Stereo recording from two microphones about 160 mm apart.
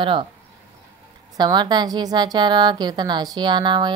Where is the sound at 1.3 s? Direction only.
25° right (ahead or behind).